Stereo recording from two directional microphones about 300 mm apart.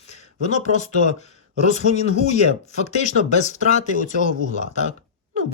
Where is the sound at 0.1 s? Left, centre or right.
Left.